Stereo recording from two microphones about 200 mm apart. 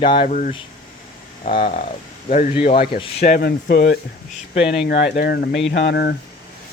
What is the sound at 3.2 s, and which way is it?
Speech, 50° left (ahead or behind).